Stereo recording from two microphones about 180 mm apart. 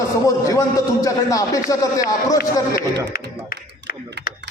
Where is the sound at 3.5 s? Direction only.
55° left (ahead or behind).